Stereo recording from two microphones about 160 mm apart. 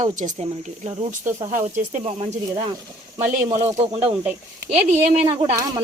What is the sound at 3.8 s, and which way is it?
Speech, 40° right (ahead or behind).